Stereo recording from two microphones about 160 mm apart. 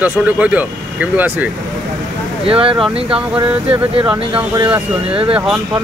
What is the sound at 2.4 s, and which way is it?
Speech, 35° right (ahead or behind).